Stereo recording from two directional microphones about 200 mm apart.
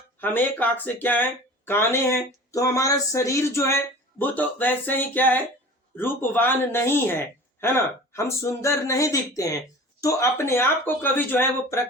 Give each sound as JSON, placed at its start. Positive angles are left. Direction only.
{"t": 0.2, "sound": "speech", "side_deg": 10}